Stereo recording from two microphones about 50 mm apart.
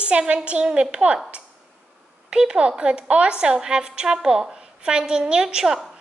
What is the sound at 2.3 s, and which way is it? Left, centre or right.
A woman's voice, centre.